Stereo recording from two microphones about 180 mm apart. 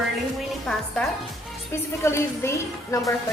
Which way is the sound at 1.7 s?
15° left (ahead or behind).